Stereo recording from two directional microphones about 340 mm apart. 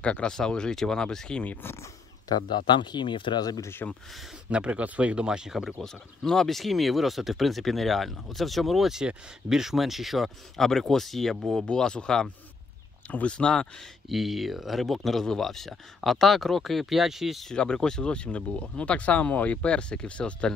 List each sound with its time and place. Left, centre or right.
0.0 s speech: centre
4.5 s speech: centre